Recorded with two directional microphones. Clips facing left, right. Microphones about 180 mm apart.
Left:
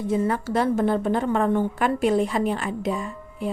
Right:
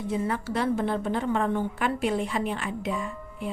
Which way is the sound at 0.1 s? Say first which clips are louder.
Left 5 dB; 45° left (ahead or behind).